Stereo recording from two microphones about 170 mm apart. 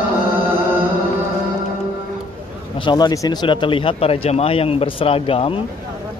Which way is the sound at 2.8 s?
25° left (ahead or behind).